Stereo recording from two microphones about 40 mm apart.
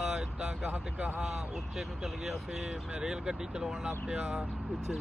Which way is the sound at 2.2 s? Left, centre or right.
Centre.